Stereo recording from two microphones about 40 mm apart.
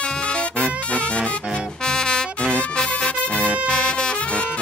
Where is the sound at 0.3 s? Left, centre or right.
Left.